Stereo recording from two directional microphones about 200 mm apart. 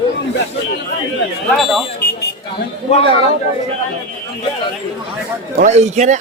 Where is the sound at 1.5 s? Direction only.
Centre (ahead or behind).